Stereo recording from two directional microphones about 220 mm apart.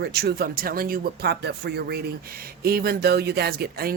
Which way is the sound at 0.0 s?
45° right (ahead or behind).